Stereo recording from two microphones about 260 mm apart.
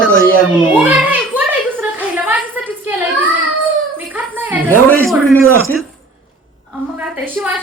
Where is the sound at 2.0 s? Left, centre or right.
Centre.